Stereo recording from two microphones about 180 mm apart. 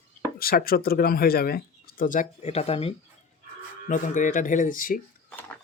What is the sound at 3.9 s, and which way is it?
Speech, 45° left (ahead or behind).